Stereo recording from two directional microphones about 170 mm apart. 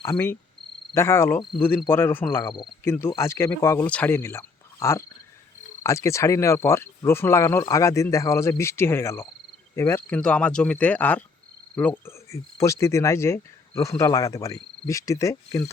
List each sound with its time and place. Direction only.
0.0 s speech: 15° left (ahead or behind)